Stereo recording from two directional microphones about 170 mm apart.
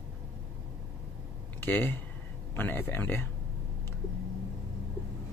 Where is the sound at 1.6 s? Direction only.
10° left (ahead or behind).